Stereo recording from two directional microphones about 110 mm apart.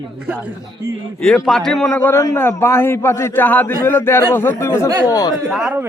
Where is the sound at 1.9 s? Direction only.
20° left (ahead or behind).